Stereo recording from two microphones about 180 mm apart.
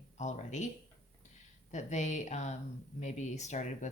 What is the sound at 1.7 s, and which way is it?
Speech, 40° left (ahead or behind).